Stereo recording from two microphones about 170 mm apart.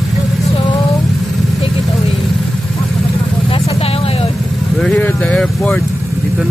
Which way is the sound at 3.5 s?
35° left (ahead or behind).